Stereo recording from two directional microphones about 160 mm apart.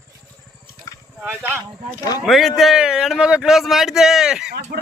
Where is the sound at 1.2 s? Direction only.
10° right (ahead or behind).